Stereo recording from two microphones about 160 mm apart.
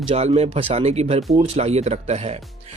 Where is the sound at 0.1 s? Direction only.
40° right (ahead or behind).